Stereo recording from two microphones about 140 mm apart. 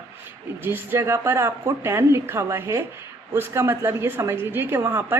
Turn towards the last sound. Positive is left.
turn(degrees=-15)  # may be behind; listen again after turning